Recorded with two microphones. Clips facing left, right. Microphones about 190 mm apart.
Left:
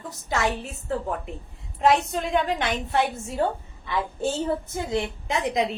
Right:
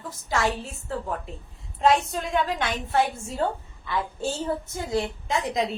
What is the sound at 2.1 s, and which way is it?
Speech, 20° left (ahead or behind).